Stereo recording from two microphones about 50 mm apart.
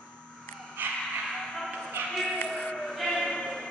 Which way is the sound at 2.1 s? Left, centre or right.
Centre.